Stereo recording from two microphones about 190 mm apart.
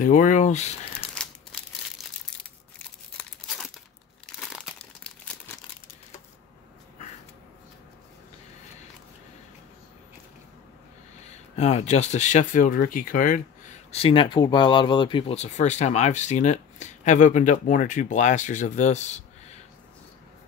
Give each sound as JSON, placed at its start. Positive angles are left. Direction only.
{"t": 0.0, "sound": "speech", "side_deg": 40}
{"t": 1.2, "sound": "crumpling", "side_deg": 5}
{"t": 3.2, "sound": "tearing", "side_deg": 0}
{"t": 11.2, "sound": "speech", "side_deg": 35}
{"t": 13.9, "sound": "speech", "side_deg": 30}